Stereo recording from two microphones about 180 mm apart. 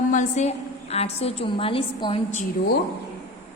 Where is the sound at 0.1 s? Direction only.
40° left (ahead or behind).